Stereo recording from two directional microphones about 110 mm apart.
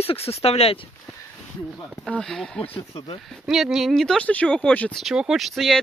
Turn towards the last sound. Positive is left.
turn(degrees=0)  # may be behind; listen again after turning